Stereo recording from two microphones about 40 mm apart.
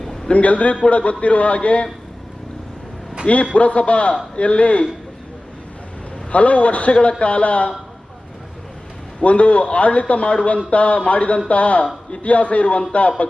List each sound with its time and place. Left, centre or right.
0.3 s a man's voice: left
3.5 s a man's voice: left
6.3 s a man's voice: left
9.2 s a man's voice: left
12.6 s speech: left
12.9 s a man's voice: left